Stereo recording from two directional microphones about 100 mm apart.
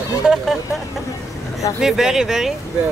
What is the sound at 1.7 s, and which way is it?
Speech, 5° right (ahead or behind).